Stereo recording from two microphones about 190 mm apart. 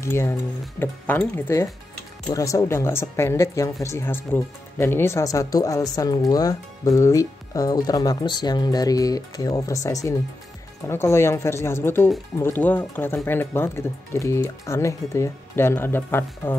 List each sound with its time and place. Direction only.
0.0 s speech: 15° left (ahead or behind)